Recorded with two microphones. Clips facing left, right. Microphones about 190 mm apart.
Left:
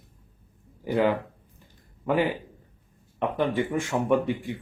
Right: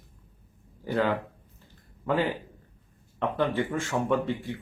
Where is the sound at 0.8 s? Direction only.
15° left (ahead or behind).